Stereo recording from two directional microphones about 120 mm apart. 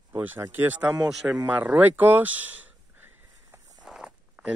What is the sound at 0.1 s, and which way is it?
Speech, 20° right (ahead or behind).